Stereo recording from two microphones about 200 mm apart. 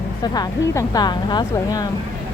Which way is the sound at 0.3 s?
15° left (ahead or behind).